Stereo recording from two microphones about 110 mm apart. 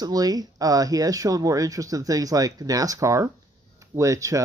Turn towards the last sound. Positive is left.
turn(degrees=-30)  # may be behind; listen again after turning